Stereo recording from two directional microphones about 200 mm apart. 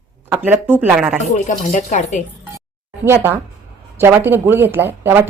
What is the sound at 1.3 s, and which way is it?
Speech, 35° left (ahead or behind).